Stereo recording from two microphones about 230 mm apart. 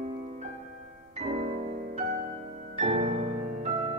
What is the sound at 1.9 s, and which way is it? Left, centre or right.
Music, right.